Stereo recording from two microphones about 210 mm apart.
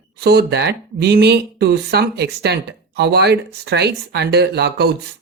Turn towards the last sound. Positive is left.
turn(degrees=-50)  # may be behind; listen again after turning